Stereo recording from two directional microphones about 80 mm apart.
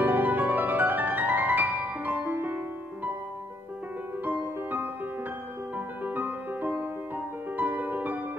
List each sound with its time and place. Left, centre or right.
0.0 s music: right
4.2 s music: right